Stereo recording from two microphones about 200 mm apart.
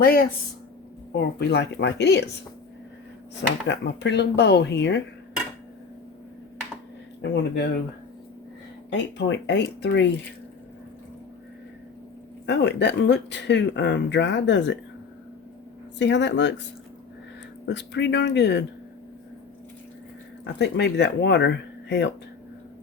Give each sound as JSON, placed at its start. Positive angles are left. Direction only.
{"t": 0.0, "sound": "speech", "side_deg": 50}
{"t": 3.7, "sound": "speech", "side_deg": 60}
{"t": 7.2, "sound": "speech", "side_deg": 55}
{"t": 8.9, "sound": "speech", "side_deg": 60}
{"t": 12.5, "sound": "speech", "side_deg": 60}
{"t": 16.0, "sound": "speech", "side_deg": 65}
{"t": 17.7, "sound": "speech", "side_deg": 60}
{"t": 20.4, "sound": "speech", "side_deg": 60}